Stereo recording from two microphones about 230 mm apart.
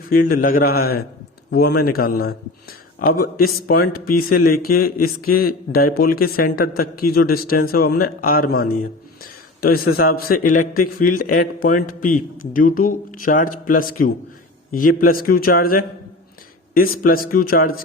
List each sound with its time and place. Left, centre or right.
0.1 s a man's voice: left